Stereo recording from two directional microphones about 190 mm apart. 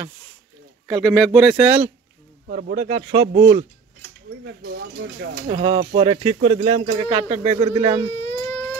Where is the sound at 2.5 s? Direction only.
45° right (ahead or behind).